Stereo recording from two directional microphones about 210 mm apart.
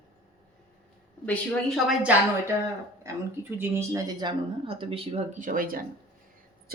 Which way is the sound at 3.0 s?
10° right (ahead or behind).